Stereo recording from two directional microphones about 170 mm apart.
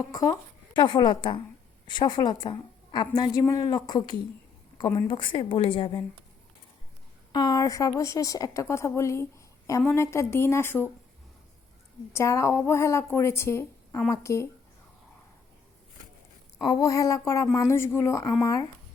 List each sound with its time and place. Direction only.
0.0 s a woman's voice: 20° left (ahead or behind)
7.3 s a woman's voice: 20° left (ahead or behind)
12.1 s speech: 15° left (ahead or behind)
16.6 s speech: 25° left (ahead or behind)